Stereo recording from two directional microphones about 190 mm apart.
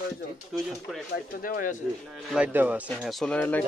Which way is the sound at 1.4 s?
45° left (ahead or behind).